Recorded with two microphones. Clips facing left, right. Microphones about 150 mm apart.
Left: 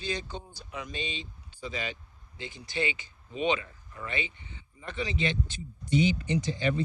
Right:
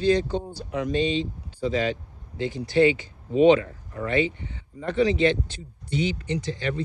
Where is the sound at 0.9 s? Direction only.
10° left (ahead or behind).